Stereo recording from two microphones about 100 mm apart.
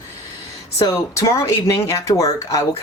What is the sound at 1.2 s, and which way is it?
Speech, 35° left (ahead or behind).